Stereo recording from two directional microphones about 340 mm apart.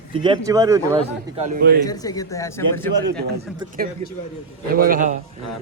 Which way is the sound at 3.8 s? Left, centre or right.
Right.